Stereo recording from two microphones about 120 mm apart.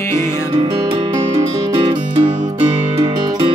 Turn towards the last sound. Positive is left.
turn(degrees=-45)  # may be behind; listen again after turning